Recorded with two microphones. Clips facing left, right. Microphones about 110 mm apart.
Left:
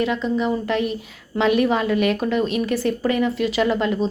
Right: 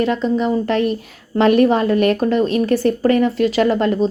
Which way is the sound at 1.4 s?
45° right (ahead or behind).